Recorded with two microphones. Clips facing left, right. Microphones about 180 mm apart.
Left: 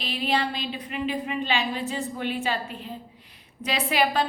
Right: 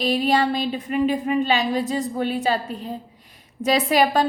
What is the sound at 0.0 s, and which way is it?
A woman's voice, 40° right (ahead or behind).